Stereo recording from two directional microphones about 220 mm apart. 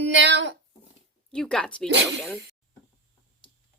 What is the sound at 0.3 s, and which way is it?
Speech, 50° right (ahead or behind).